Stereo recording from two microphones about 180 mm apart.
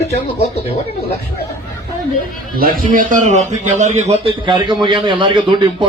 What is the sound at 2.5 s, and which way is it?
A man's voice, 55° right (ahead or behind).